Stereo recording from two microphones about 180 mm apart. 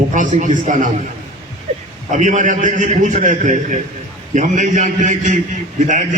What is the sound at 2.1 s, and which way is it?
A man's voice, 45° right (ahead or behind).